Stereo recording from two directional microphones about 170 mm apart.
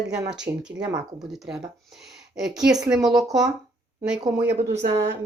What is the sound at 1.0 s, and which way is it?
A woman's voice, centre (ahead or behind).